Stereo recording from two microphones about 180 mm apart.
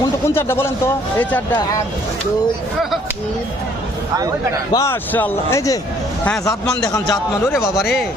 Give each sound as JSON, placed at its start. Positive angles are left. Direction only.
{"t": 0.0, "sound": "a man's voice", "side_deg": 15}
{"t": 4.7, "sound": "a man's voice", "side_deg": 15}
{"t": 6.9, "sound": "a man's voice", "side_deg": 15}